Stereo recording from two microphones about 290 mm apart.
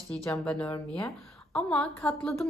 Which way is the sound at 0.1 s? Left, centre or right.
Centre.